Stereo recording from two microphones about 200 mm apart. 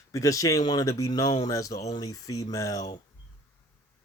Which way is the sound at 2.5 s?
15° left (ahead or behind).